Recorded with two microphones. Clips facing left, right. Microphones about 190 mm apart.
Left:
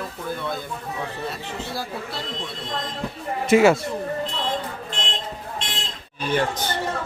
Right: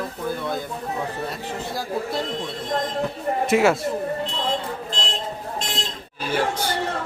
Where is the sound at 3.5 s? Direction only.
Centre (ahead or behind).